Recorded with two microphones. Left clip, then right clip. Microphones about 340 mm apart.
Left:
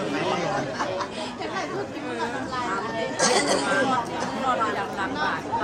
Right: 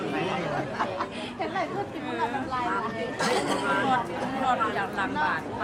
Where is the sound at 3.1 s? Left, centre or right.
Centre.